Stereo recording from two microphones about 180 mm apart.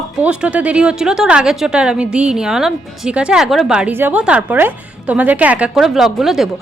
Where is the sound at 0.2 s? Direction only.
5° right (ahead or behind).